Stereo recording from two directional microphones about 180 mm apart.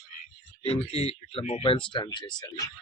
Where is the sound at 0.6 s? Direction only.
35° left (ahead or behind).